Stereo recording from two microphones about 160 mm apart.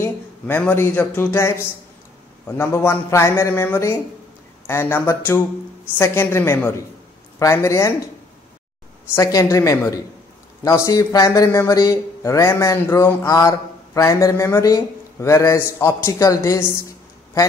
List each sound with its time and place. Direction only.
0.0 s speech: 10° left (ahead or behind)
9.1 s speech: 20° left (ahead or behind)